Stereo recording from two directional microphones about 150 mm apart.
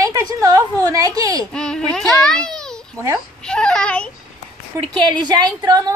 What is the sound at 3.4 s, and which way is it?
Speech, 5° left (ahead or behind).